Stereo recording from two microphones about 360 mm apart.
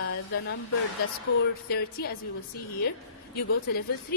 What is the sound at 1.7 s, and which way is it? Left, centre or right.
Speech, left.